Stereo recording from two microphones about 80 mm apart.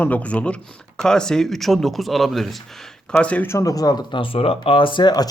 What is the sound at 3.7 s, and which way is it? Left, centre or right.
Speech, left.